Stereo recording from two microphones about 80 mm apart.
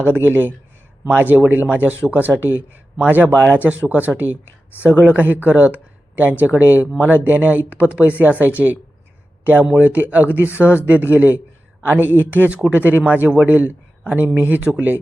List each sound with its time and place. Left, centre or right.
0.0 s speech: right
4.7 s speech: left
4.9 s a man's voice: centre